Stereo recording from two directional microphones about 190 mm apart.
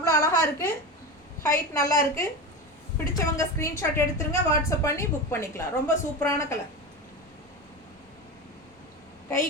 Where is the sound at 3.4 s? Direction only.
15° left (ahead or behind).